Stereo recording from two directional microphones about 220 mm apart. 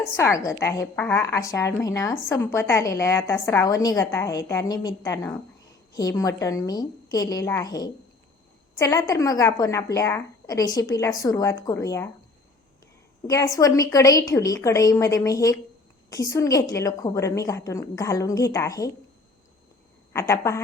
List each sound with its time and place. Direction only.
0.2 s a woman's voice: 15° left (ahead or behind)
13.2 s a woman's voice: 15° left (ahead or behind)
20.1 s a woman's voice: 15° left (ahead or behind)